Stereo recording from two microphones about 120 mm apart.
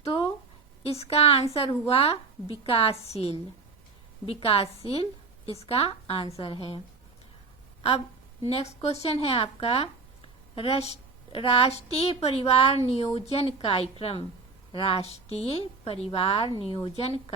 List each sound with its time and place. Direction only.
0.0 s a sound: 50° left (ahead or behind)
0.8 s a woman's voice: 55° left (ahead or behind)
4.3 s a woman's voice: 50° left (ahead or behind)